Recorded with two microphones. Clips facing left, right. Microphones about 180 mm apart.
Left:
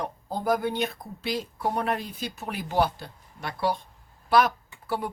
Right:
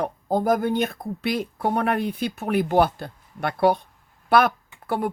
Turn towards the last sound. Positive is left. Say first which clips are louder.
# right 4 dB
turn(degrees=-55)  # may be behind; listen again after turning